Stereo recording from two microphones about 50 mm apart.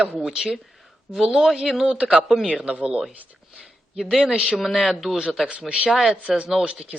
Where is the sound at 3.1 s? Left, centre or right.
Right.